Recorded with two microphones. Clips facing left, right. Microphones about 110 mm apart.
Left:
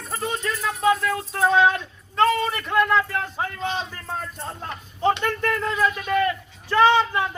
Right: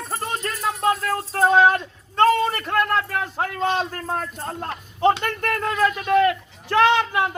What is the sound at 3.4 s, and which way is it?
A man's voice, 60° right (ahead or behind).